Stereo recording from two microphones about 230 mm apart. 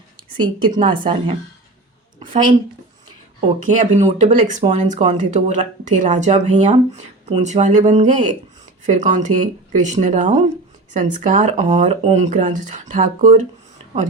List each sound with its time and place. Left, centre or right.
0.2 s a woman's voice: centre
2.1 s a sound: right
3.6 s speech: right